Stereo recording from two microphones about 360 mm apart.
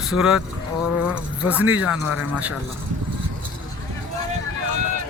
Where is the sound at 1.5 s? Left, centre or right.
Centre.